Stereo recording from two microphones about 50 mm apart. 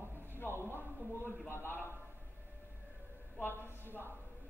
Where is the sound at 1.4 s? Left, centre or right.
Left.